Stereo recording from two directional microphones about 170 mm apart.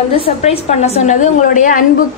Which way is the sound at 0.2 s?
35° left (ahead or behind).